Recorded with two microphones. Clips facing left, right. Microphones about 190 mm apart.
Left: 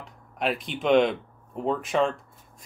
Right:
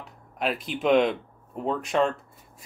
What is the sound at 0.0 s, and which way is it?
Speech, centre (ahead or behind).